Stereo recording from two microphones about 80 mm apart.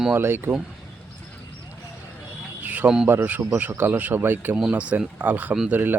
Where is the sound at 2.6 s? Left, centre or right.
Right.